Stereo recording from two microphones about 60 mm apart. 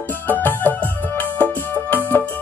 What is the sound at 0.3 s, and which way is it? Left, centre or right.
Music, left.